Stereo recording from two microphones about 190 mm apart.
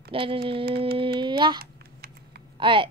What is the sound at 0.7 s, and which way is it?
Music, 55° right (ahead or behind).